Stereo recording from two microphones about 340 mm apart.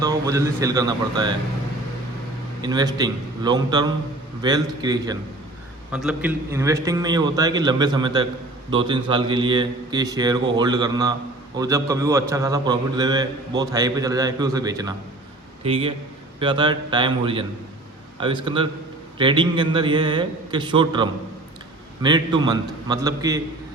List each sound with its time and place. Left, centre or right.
0.0 s a man's voice: centre
2.6 s a man's voice: centre